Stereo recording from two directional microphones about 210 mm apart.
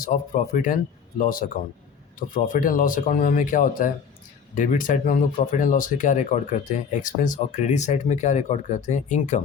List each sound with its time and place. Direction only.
0.0 s a man's voice: 40° left (ahead or behind)